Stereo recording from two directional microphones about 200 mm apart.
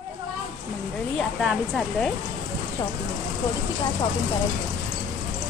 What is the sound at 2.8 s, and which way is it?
Speech, 10° left (ahead or behind).